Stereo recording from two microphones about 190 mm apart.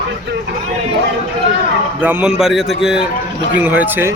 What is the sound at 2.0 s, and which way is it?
A man's voice, 10° right (ahead or behind).